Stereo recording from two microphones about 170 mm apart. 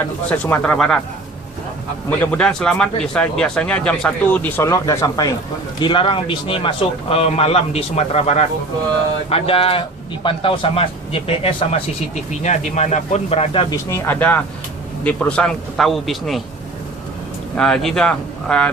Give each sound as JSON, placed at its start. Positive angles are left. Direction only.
{"t": 0.0, "sound": "speech", "side_deg": 10}
{"t": 2.0, "sound": "a man's voice", "side_deg": 10}
{"t": 13.9, "sound": "a man's voice", "side_deg": 15}
{"t": 17.6, "sound": "a man's voice", "side_deg": 5}